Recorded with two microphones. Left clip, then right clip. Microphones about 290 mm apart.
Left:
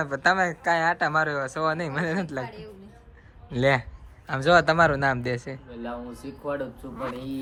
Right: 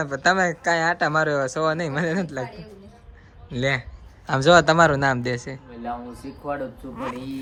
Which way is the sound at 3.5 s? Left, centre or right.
Centre.